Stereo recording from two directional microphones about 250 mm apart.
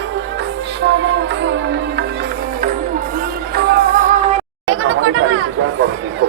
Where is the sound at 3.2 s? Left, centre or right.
Right.